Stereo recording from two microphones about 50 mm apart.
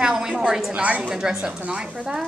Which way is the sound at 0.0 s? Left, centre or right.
Centre.